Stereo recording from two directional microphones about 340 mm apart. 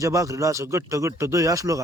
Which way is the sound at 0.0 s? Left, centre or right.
Centre.